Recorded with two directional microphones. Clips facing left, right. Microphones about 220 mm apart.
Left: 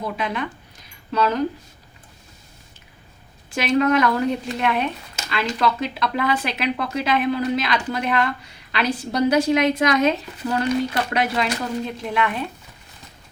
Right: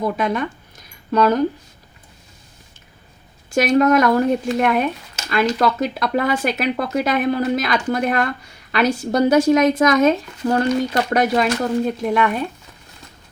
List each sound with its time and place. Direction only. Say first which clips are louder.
0.0 s speech: right 6 dB; 45° right (ahead or behind)
3.5 s speech: right 4 dB; 45° right (ahead or behind)